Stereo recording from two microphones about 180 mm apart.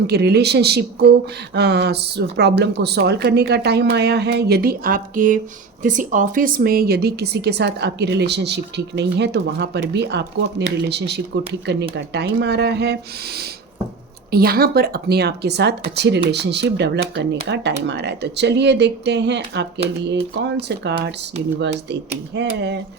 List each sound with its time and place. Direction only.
0.1 s a woman's voice: 65° right (ahead or behind)